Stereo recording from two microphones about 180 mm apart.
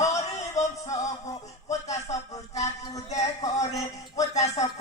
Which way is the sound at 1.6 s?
40° left (ahead or behind).